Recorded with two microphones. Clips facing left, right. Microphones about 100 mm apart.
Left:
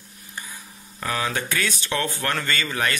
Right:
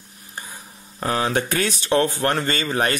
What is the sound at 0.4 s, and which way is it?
Speech, 35° right (ahead or behind).